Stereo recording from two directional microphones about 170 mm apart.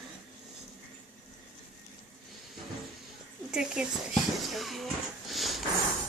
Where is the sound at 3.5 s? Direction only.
5° right (ahead or behind).